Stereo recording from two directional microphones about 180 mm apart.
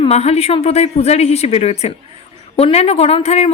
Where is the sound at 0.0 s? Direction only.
35° left (ahead or behind).